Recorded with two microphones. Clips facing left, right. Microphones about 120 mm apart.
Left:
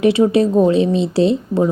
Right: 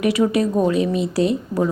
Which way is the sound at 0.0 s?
30° left (ahead or behind).